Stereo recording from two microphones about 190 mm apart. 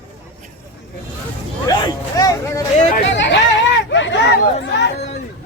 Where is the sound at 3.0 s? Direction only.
70° left (ahead or behind).